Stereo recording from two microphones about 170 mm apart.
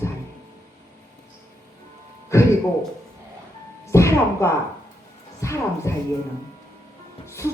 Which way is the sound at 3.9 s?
15° left (ahead or behind).